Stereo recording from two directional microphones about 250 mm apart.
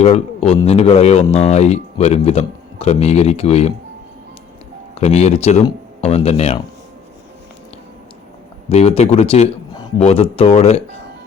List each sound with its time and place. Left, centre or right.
0.0 s speech: left
4.9 s speech: left
8.7 s speech: left